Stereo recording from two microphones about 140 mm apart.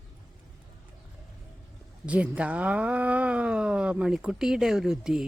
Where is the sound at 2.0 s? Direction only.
10° right (ahead or behind).